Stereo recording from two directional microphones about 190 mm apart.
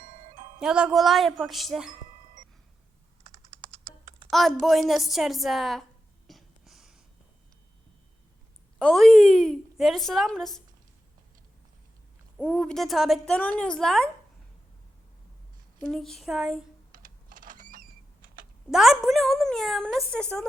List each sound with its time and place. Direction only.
0.0 s music: 40° right (ahead or behind)
0.6 s a woman's voice: 5° right (ahead or behind)
4.3 s a woman's voice: centre (ahead or behind)
6.2 s a sound: centre (ahead or behind)
8.8 s a woman's voice: centre (ahead or behind)
12.4 s a woman's voice: centre (ahead or behind)
15.9 s a woman's voice: centre (ahead or behind)
16.9 s typing: 45° right (ahead or behind)
18.7 s a woman's voice: centre (ahead or behind)